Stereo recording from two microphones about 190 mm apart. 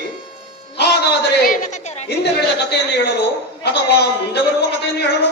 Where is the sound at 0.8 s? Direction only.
60° left (ahead or behind).